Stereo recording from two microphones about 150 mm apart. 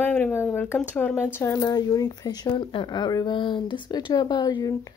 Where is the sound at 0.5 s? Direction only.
10° left (ahead or behind).